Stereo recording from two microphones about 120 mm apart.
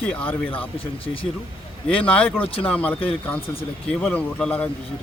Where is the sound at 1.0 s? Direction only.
50° left (ahead or behind).